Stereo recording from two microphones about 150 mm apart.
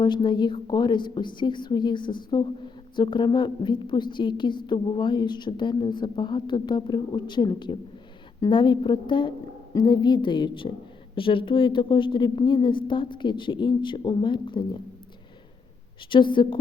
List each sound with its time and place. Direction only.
0.0 s a woman's voice: 30° left (ahead or behind)
16.0 s a woman's voice: 35° left (ahead or behind)